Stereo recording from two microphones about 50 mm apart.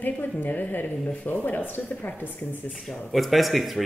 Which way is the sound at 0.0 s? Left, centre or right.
Left.